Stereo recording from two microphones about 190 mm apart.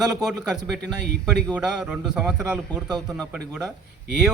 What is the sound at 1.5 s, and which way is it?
A man's voice, 5° right (ahead or behind).